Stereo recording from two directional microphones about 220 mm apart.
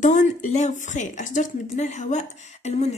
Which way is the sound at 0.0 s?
35° left (ahead or behind).